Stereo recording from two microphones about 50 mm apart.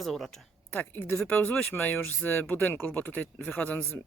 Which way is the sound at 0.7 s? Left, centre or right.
Left.